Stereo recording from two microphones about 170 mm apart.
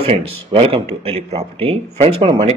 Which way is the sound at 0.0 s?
35° right (ahead or behind).